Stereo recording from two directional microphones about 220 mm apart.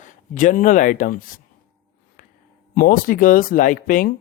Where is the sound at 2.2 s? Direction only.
40° left (ahead or behind).